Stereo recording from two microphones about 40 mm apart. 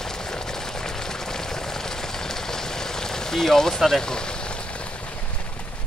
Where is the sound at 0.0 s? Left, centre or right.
Centre.